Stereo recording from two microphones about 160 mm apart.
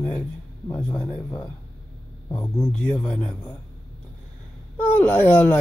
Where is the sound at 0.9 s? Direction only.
25° left (ahead or behind).